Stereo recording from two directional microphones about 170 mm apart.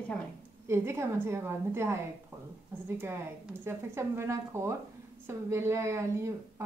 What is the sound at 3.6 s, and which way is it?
Speech, 15° right (ahead or behind).